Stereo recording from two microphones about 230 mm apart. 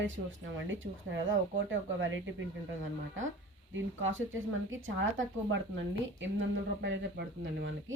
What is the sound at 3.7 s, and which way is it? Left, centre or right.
Speech, right.